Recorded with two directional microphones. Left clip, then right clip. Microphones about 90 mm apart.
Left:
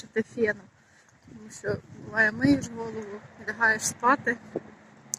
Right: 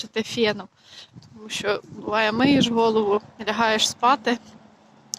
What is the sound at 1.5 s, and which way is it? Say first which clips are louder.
Speech: right 8 dB; 50° right (ahead or behind).